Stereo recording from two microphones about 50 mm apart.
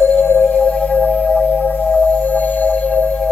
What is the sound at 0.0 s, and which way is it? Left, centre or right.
Music, left.